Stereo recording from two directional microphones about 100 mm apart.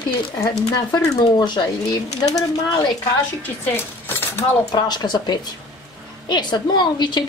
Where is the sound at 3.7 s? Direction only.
20° left (ahead or behind).